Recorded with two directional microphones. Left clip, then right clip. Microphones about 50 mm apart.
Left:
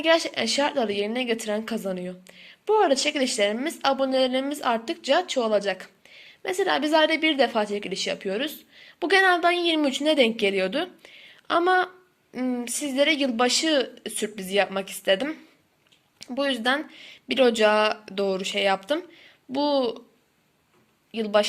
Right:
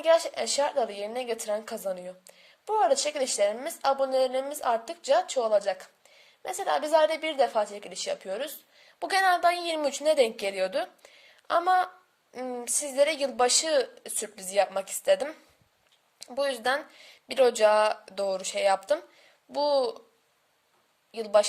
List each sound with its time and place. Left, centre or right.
0.0 s a woman's voice: right
8.7 s a woman's voice: right
16.1 s speech: right
18.2 s a woman's voice: right
21.1 s speech: right